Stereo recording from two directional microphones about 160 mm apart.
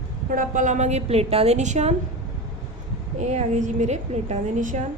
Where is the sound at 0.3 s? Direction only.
55° right (ahead or behind).